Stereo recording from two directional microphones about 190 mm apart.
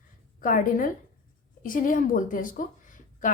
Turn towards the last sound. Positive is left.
turn(degrees=45)  # may be behind; listen again after turning